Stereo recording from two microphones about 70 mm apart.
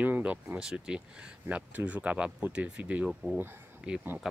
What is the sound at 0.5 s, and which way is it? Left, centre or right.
Speech, centre.